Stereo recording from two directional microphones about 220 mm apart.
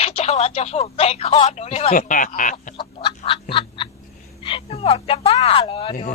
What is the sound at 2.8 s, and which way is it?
Chicken, 25° left (ahead or behind).